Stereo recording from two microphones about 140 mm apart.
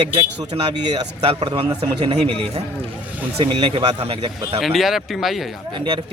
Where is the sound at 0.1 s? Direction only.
40° right (ahead or behind).